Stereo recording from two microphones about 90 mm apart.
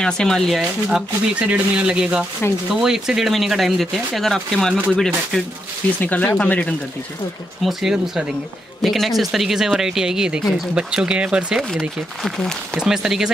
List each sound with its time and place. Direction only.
0.0 s speech: 5° left (ahead or behind)
0.6 s speech: 5° right (ahead or behind)
5.9 s speech: 20° left (ahead or behind)
7.6 s speech: 5° right (ahead or behind)
12.2 s speech: 5° left (ahead or behind)